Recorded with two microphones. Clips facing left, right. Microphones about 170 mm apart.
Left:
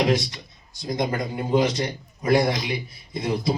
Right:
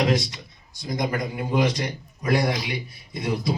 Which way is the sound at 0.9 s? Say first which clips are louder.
Left 1 dB; 25° left (ahead or behind).